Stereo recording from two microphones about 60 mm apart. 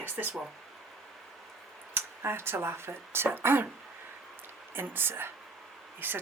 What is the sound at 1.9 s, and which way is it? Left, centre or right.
Speech, right.